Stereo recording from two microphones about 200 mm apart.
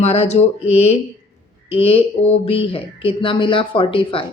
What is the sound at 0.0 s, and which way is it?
Speech, 35° left (ahead or behind).